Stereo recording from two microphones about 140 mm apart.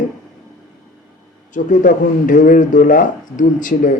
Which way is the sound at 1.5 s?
65° left (ahead or behind).